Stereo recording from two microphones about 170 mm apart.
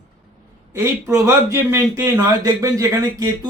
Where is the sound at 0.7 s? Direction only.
15° right (ahead or behind).